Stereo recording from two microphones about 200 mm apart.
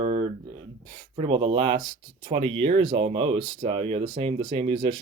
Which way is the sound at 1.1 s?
25° right (ahead or behind).